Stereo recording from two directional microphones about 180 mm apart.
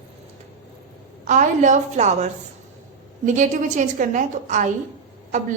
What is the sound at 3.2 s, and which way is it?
A woman's voice, 40° right (ahead or behind).